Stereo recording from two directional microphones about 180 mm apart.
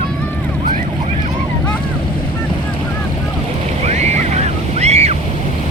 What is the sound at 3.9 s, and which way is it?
Waves, 40° right (ahead or behind).